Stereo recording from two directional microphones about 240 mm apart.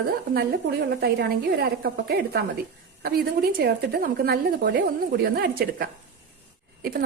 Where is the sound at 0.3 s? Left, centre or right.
Right.